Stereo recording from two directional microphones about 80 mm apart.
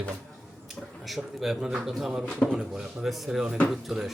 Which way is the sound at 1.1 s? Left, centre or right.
Centre.